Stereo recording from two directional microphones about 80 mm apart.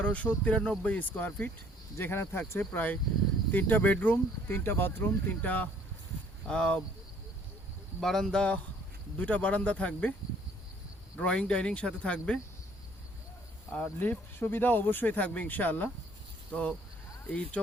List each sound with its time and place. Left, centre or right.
0.0 s speech: centre
2.0 s speech: left; by 6.8 s centre
8.0 s speech: centre
11.2 s speech: centre
13.7 s speech: centre